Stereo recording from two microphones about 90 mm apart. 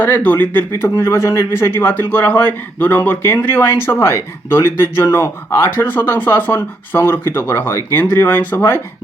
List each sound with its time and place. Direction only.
0.0 s speech: 20° left (ahead or behind)